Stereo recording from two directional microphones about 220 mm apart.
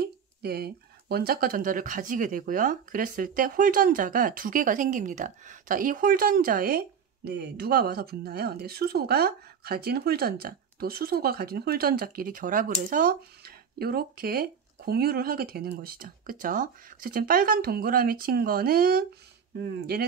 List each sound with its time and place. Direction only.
0.0 s speech: 45° right (ahead or behind)